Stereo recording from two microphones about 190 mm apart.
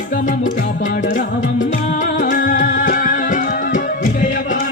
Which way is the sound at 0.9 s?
45° left (ahead or behind).